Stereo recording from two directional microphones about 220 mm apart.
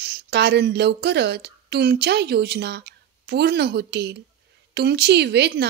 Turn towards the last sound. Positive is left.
turn(degrees=-50)  # may be behind; listen again after turning